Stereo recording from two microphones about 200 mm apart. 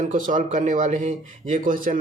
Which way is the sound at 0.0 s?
40° right (ahead or behind).